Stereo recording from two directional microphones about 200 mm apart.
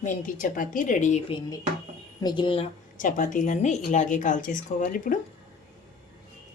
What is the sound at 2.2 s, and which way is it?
Speech, 20° left (ahead or behind).